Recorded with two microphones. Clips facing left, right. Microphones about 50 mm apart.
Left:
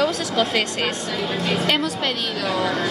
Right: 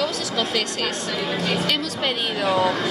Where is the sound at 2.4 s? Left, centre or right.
Right.